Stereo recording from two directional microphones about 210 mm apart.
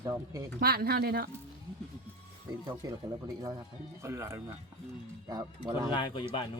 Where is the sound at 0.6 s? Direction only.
45° right (ahead or behind).